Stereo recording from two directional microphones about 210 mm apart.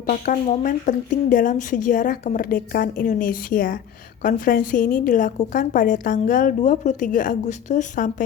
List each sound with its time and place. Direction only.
0.0 s a woman's voice: 40° left (ahead or behind)